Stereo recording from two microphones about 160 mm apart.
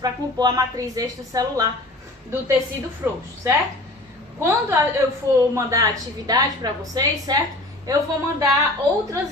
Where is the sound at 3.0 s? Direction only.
10° right (ahead or behind).